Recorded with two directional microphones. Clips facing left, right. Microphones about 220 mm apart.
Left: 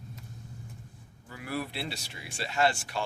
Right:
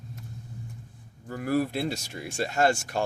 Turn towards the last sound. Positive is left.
turn(degrees=-45)  # may be behind; listen again after turning